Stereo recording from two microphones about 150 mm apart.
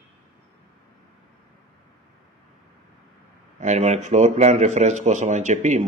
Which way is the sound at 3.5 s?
50° right (ahead or behind).